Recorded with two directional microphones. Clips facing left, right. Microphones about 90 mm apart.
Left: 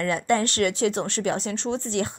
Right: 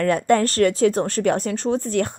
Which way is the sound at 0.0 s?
45° right (ahead or behind).